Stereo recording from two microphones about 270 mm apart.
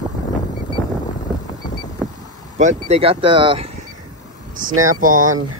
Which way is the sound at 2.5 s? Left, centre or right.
Right.